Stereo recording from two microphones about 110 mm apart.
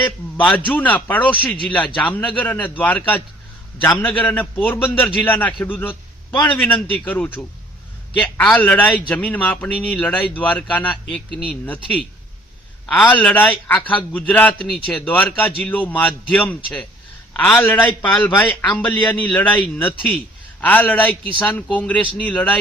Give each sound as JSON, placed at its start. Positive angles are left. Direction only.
{"t": 0.0, "sound": "a man's voice", "side_deg": 15}